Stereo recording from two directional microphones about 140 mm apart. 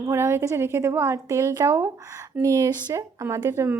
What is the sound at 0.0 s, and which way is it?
Speech, 20° right (ahead or behind).